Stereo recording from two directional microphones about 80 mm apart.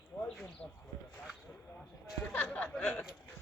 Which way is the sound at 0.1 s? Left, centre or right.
Left.